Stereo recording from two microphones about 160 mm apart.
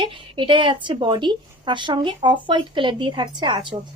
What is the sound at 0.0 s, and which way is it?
A woman's voice, 30° right (ahead or behind).